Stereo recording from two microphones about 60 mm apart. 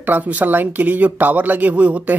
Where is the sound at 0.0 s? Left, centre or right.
Right.